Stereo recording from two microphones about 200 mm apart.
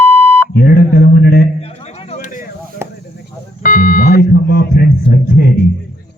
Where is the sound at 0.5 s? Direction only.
50° left (ahead or behind).